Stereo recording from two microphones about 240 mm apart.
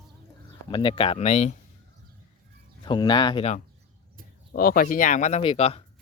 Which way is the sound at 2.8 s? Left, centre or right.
Centre.